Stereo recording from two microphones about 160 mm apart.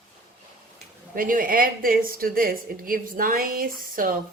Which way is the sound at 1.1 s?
60° right (ahead or behind).